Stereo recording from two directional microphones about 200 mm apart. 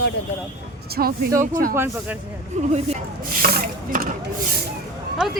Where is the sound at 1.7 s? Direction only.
10° right (ahead or behind).